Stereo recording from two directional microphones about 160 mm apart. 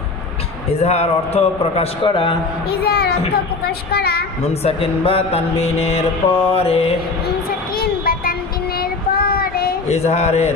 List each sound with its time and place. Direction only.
0.7 s music: 40° left (ahead or behind)
2.7 s a woman's voice: 75° left (ahead or behind)
4.4 s music: 40° left (ahead or behind)
7.2 s child singing: 70° left (ahead or behind)
9.8 s speech: 40° left (ahead or behind)